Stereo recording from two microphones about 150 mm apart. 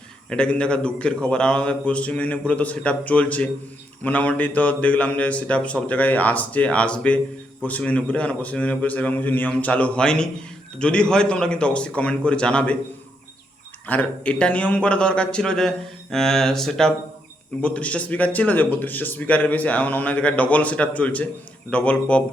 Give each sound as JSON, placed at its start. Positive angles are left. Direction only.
{"t": 0.3, "sound": "speech", "side_deg": 5}
{"t": 13.8, "sound": "speech", "side_deg": 10}